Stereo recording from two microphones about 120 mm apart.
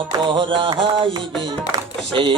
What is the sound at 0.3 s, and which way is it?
Music, 45° right (ahead or behind).